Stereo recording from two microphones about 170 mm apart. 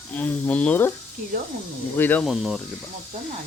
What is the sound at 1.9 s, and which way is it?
Speech, 10° left (ahead or behind).